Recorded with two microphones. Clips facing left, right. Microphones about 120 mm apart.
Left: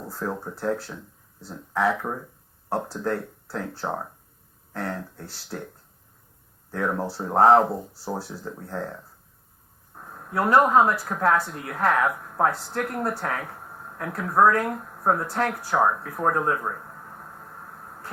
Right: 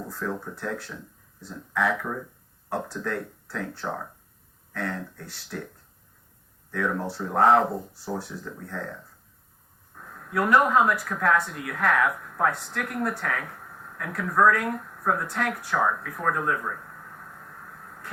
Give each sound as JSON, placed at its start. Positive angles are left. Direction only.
{"t": 0.1, "sound": "speech", "side_deg": 35}
{"t": 6.7, "sound": "speech", "side_deg": 35}
{"t": 9.9, "sound": "a sound", "side_deg": 30}
{"t": 10.3, "sound": "speech", "side_deg": 30}